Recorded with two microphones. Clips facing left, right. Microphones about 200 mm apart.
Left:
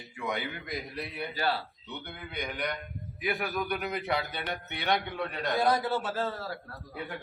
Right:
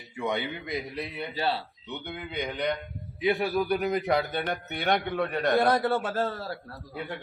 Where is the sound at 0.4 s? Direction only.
20° right (ahead or behind).